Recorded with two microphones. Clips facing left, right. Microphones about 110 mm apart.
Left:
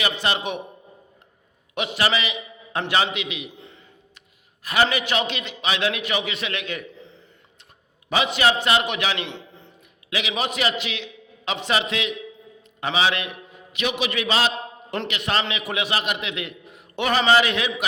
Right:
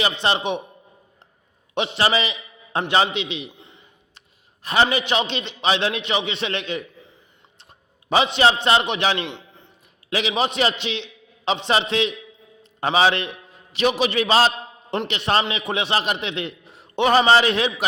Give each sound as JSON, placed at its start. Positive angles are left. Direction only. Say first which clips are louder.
{"t": 0.0, "sound": "a man's voice", "louder": "right 3 dB", "side_deg": -25}
{"t": 1.7, "sound": "a man's voice", "louder": "right 3 dB", "side_deg": -30}
{"t": 3.5, "sound": "a sound", "louder": "left 3 dB", "side_deg": -20}
{"t": 4.6, "sound": "a man's voice", "louder": "right 2 dB", "side_deg": -25}
{"t": 8.1, "sound": "a man's voice", "louder": "right 3 dB", "side_deg": -30}
{"t": 9.3, "sound": "a sound", "louder": "left 1 dB", "side_deg": -15}
{"t": 10.1, "sound": "a man's voice", "louder": "right 4 dB", "side_deg": -35}